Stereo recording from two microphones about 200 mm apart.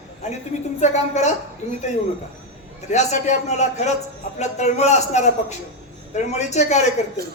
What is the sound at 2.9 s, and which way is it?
Speech, 35° left (ahead or behind).